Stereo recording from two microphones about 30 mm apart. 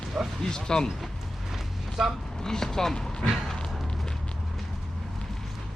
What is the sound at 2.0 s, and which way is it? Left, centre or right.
Speech, centre.